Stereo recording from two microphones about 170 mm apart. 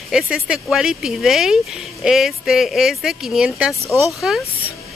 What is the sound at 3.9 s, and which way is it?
Speech, 15° left (ahead or behind).